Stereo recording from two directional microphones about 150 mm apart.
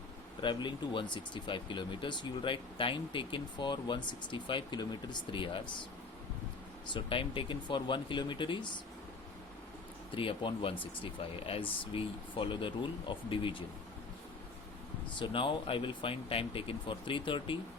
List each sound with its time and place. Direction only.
0.4 s speech: 30° left (ahead or behind)
6.9 s speech: 35° left (ahead or behind)
10.1 s speech: 35° left (ahead or behind)
15.2 s speech: 35° left (ahead or behind)